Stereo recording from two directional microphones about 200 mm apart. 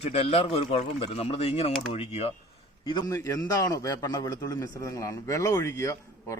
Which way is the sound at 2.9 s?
15° left (ahead or behind).